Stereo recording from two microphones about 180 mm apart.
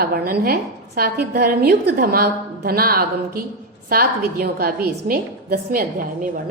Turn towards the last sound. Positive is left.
turn(degrees=-50)  # may be behind; listen again after turning